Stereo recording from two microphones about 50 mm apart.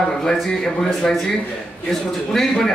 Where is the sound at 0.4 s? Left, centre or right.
Centre.